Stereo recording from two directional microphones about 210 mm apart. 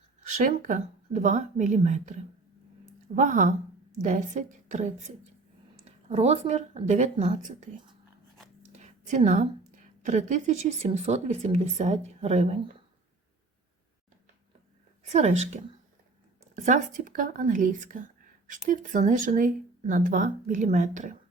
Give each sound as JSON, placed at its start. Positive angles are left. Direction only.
{"t": 0.3, "sound": "a woman's voice", "side_deg": -40}
{"t": 3.2, "sound": "a woman's voice", "side_deg": -40}
{"t": 8.8, "sound": "a woman's voice", "side_deg": -35}
{"t": 15.0, "sound": "a woman's voice", "side_deg": -30}
{"t": 16.6, "sound": "a woman's voice", "side_deg": -35}